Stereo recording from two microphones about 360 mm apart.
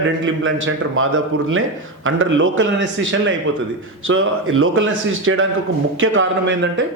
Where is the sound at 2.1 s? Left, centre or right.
Right.